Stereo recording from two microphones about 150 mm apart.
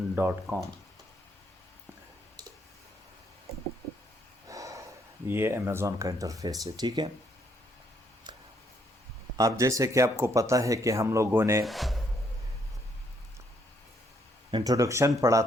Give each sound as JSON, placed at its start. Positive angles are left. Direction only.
{"t": 0.2, "sound": "speech", "side_deg": -15}
{"t": 4.4, "sound": "snort", "side_deg": -20}
{"t": 5.3, "sound": "speech", "side_deg": -15}
{"t": 9.3, "sound": "speech", "side_deg": -20}
{"t": 11.6, "sound": "speech", "side_deg": 0}
{"t": 14.5, "sound": "speech", "side_deg": -25}